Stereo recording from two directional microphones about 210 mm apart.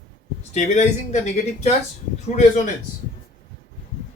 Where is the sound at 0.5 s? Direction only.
35° left (ahead or behind).